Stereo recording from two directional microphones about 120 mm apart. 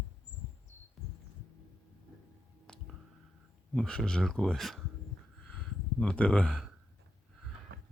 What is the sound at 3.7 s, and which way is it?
Speech, 5° left (ahead or behind).